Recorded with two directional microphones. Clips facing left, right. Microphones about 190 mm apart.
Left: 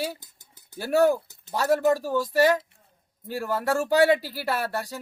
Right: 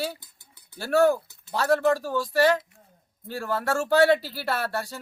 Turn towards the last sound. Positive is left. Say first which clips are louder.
# even
turn(degrees=15)  # may be behind; listen again after turning